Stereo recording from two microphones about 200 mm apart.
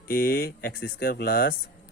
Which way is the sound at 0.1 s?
50° left (ahead or behind).